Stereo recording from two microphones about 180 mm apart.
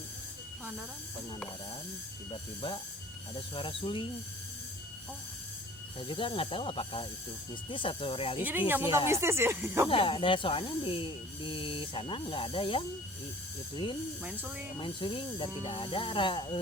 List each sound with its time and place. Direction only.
2.3 s speech: 25° left (ahead or behind)
6.0 s speech: 30° left (ahead or behind)
8.4 s speech: 10° right (ahead or behind)
9.9 s speech: 30° left (ahead or behind)
14.8 s speech: 30° left (ahead or behind)